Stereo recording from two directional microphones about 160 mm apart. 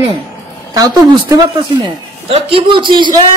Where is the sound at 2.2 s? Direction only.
35° right (ahead or behind).